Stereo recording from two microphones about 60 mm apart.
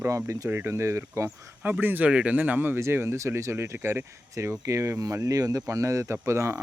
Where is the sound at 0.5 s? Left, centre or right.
Right.